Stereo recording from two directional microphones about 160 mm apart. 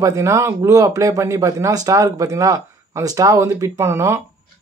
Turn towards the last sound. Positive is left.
turn(degrees=-15)  # may be behind; listen again after turning